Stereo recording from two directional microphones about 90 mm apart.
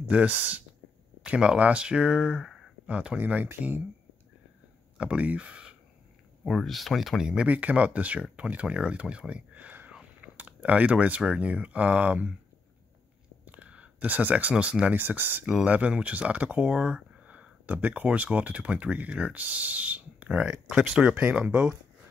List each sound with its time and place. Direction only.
0.0 s speech: 15° right (ahead or behind)
4.9 s speech: 15° right (ahead or behind)
13.5 s speech: 15° right (ahead or behind)